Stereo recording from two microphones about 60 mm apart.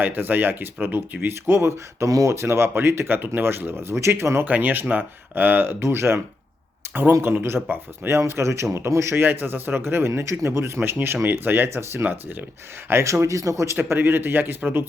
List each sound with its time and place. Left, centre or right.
0.0 s speech: right
2.0 s speech: right
4.4 s speech: right
9.2 s speech: right
10.8 s speech: right
12.9 s speech: right
13.9 s speech: right